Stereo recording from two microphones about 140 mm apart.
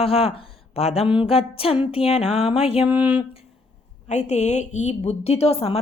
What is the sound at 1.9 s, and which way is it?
Speech, 45° left (ahead or behind).